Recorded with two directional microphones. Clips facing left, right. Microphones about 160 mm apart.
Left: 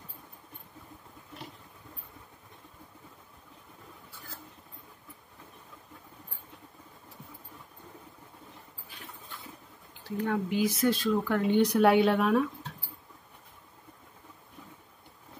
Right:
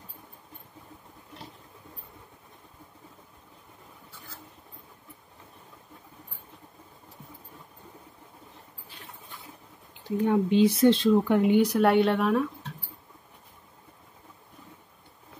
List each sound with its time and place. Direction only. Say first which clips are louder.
9.9 s speech: right 6 dB; 20° right (ahead or behind)
11.6 s speech: right 1 dB; centre (ahead or behind)